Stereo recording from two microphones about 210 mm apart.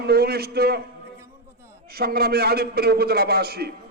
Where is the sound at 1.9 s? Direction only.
45° right (ahead or behind).